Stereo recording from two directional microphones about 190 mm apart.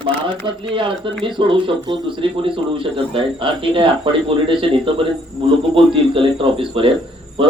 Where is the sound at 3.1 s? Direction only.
25° right (ahead or behind).